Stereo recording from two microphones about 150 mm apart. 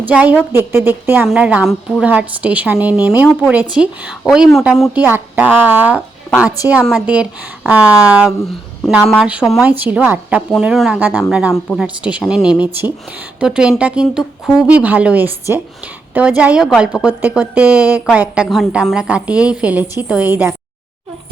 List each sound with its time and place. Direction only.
0.1 s a woman's voice: 10° right (ahead or behind)